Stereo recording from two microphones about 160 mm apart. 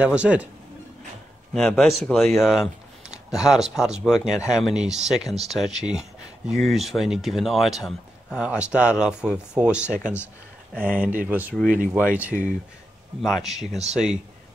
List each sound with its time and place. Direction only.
0.0 s speech: 10° right (ahead or behind)
1.5 s speech: centre (ahead or behind)
11.6 s speech: 60° right (ahead or behind)
11.9 s speech: 10° right (ahead or behind)